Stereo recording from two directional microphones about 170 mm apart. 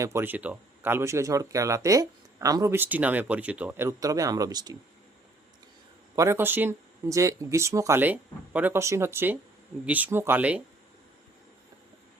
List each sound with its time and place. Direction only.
0.0 s speech: 15° right (ahead or behind)
6.1 s speech: 15° right (ahead or behind)